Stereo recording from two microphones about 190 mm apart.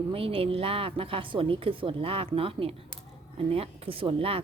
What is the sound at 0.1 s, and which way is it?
A woman's voice, 30° right (ahead or behind).